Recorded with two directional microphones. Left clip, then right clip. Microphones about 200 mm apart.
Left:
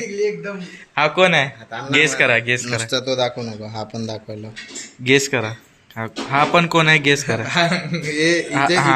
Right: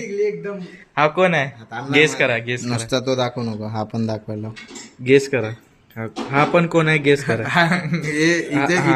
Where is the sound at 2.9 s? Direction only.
55° right (ahead or behind).